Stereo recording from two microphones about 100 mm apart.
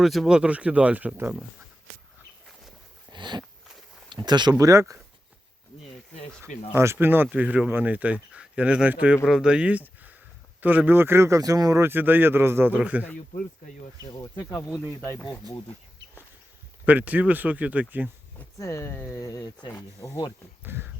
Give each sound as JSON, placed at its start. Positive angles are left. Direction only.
{"t": 0.0, "sound": "speech", "side_deg": 0}
{"t": 3.1, "sound": "a sound", "side_deg": -50}
{"t": 4.1, "sound": "speech", "side_deg": -45}
{"t": 4.5, "sound": "speech", "side_deg": -30}
{"t": 6.7, "sound": "a man's voice", "side_deg": -25}
{"t": 11.8, "sound": "a man's voice", "side_deg": -20}
{"t": 14.0, "sound": "speech", "side_deg": 40}
{"t": 14.8, "sound": "speech", "side_deg": 20}
{"t": 16.8, "sound": "speech", "side_deg": -15}
{"t": 18.6, "sound": "speech", "side_deg": 25}
{"t": 20.6, "sound": "a man's voice", "side_deg": -20}